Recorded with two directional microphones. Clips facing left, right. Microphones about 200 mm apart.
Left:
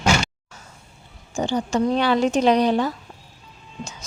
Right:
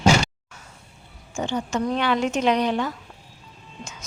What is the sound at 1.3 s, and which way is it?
Speech, 35° left (ahead or behind).